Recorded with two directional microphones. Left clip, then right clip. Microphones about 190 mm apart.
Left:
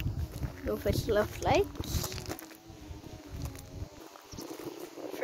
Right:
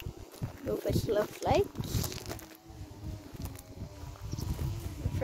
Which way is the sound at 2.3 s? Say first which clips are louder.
Left 2 dB; 50° left (ahead or behind).